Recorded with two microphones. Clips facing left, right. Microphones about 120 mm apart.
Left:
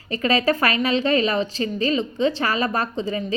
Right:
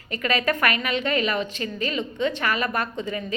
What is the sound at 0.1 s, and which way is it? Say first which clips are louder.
A woman's voice: left 4 dB; 35° left (ahead or behind).